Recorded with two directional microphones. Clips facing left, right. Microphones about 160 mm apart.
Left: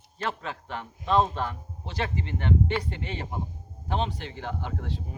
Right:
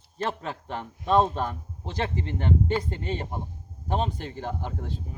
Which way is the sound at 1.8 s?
35° right (ahead or behind).